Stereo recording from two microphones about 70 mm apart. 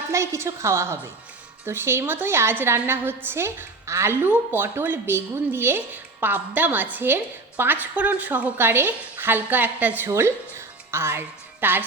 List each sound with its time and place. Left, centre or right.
0.1 s a woman's voice: right